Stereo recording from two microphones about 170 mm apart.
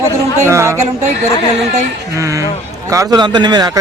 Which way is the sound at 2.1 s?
20° right (ahead or behind).